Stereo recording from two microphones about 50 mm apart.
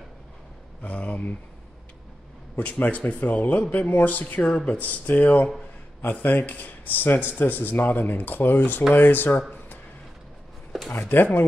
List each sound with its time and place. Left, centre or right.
0.8 s speech: left
2.5 s speech: left
10.9 s speech: left